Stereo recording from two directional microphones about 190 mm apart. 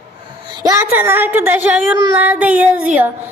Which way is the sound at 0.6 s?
15° right (ahead or behind).